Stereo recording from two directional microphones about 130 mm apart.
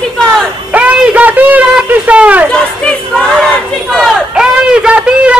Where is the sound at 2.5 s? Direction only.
5° left (ahead or behind).